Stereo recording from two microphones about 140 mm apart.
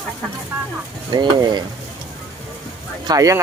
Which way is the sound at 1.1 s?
30° right (ahead or behind).